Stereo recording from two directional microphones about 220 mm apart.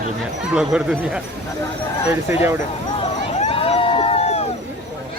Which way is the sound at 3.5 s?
25° left (ahead or behind).